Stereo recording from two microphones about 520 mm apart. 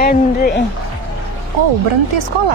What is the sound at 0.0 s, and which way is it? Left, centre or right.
Speech, centre.